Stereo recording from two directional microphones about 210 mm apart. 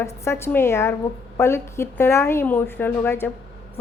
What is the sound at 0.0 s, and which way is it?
A woman's voice, 10° left (ahead or behind).